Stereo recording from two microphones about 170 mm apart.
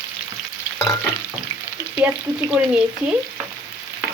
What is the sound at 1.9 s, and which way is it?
Speech, 10° right (ahead or behind).